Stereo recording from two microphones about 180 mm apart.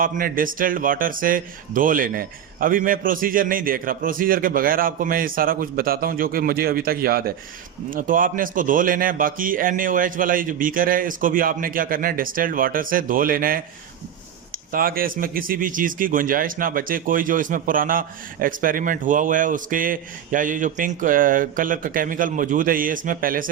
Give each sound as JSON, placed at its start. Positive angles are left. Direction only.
{"t": 0.0, "sound": "speech", "side_deg": -50}
{"t": 14.7, "sound": "speech", "side_deg": -50}